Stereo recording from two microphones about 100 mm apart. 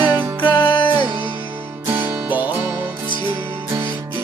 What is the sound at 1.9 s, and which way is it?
Music, 20° right (ahead or behind).